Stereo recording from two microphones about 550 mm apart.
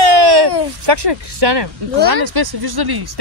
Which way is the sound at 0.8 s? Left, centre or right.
Right.